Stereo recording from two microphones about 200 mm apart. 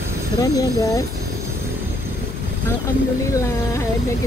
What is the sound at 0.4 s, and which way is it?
Speech, 15° left (ahead or behind).